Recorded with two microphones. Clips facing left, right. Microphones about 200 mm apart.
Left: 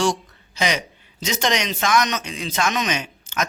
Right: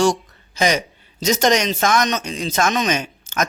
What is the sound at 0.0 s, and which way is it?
A man's voice, 45° right (ahead or behind).